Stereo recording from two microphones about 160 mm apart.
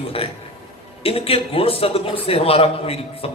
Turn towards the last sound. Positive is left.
turn(degrees=35)  # may be behind; listen again after turning